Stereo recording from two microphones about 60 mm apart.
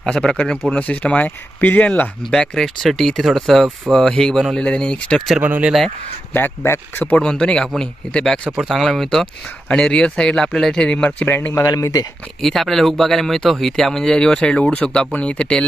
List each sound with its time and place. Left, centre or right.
0.0 s speech: centre; by 1.9 s left
2.3 s speech: centre
5.4 s speech: right
6.6 s speech: left
7.2 s speech: centre
11.3 s speech: left
11.6 s speech: left
12.4 s speech: centre